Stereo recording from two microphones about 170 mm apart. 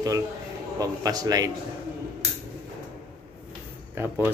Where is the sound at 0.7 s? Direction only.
20° right (ahead or behind).